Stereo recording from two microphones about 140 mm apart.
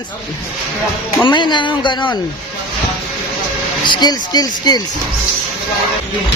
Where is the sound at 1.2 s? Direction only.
35° left (ahead or behind).